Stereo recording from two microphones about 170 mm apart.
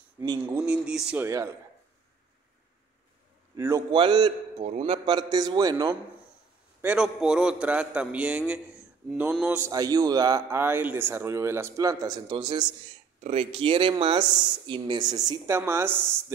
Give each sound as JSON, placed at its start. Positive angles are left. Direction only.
{"t": 0.2, "sound": "speech", "side_deg": -20}
{"t": 0.6, "sound": "a man's voice", "side_deg": -5}
{"t": 3.5, "sound": "speech", "side_deg": -20}
{"t": 4.6, "sound": "speech", "side_deg": -40}
{"t": 6.8, "sound": "a man's voice", "side_deg": -5}
{"t": 9.6, "sound": "speech", "side_deg": -20}